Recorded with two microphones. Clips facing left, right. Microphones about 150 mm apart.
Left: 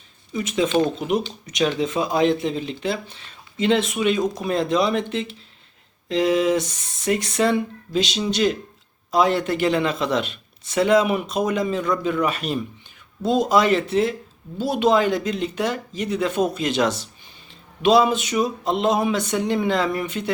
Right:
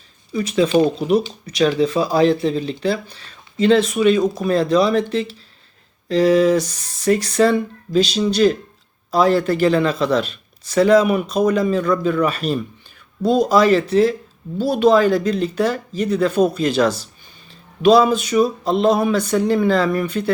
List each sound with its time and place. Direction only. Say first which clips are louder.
0.3 s speech: right 4 dB; 20° left (ahead or behind)
0.7 s speech: right 5 dB; 15° right (ahead or behind)
0.9 s speech: right 5 dB; 20° left (ahead or behind)